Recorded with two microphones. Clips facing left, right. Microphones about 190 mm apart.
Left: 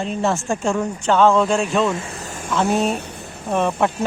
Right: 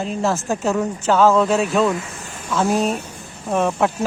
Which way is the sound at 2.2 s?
45° left (ahead or behind).